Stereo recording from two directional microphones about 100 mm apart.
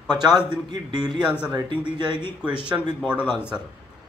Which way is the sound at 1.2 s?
10° right (ahead or behind).